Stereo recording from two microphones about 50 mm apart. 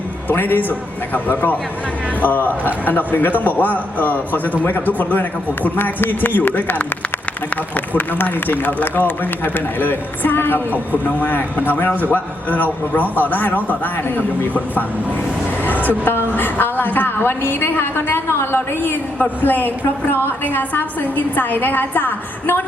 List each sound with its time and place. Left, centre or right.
0.3 s a woman's voice: left
7.9 s a woman's voice: left
15.6 s vehicle: left
16.3 s a woman's voice: left